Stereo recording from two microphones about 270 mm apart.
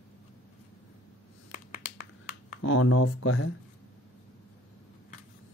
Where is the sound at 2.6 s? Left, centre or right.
Left.